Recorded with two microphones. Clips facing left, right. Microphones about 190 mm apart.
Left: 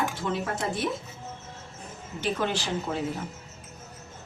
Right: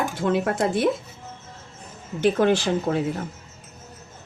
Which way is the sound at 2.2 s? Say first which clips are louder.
Right 9 dB; 60° right (ahead or behind).